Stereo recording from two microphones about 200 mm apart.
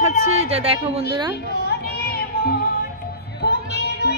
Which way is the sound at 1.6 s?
50° left (ahead or behind).